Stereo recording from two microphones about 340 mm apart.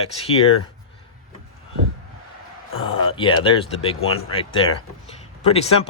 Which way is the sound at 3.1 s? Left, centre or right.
Centre.